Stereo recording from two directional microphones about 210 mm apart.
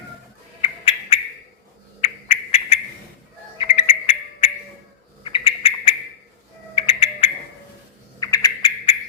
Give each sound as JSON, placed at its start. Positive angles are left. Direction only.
{"t": 0.6, "sound": "a sound", "side_deg": 25}
{"t": 2.0, "sound": "owl", "side_deg": 30}
{"t": 3.6, "sound": "music", "side_deg": 30}
{"t": 5.2, "sound": "bird", "side_deg": 25}
{"t": 6.7, "sound": "music", "side_deg": 25}
{"t": 8.2, "sound": "cricket", "side_deg": 15}